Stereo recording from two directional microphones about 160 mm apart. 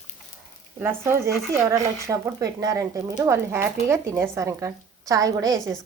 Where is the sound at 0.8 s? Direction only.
15° right (ahead or behind).